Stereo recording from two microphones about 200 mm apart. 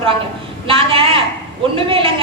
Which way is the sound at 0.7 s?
25° right (ahead or behind).